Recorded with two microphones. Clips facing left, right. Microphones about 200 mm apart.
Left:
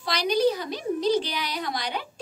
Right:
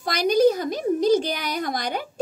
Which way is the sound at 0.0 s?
50° right (ahead or behind).